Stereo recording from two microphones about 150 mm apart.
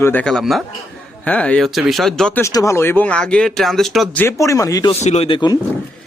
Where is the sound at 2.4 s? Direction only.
20° left (ahead or behind); by 4.2 s centre (ahead or behind).